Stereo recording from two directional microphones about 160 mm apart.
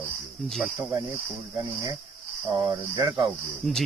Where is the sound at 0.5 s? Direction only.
Centre (ahead or behind).